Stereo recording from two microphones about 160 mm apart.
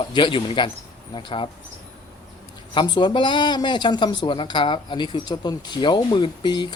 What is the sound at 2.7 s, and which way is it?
Speech, 30° left (ahead or behind).